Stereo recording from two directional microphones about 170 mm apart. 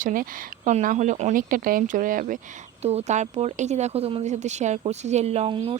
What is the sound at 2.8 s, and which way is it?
Speech, 40° right (ahead or behind).